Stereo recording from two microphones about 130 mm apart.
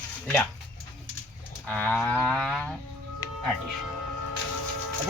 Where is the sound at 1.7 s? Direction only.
10° left (ahead or behind).